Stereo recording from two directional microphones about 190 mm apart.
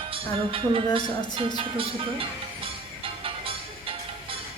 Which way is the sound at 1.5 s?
30° right (ahead or behind).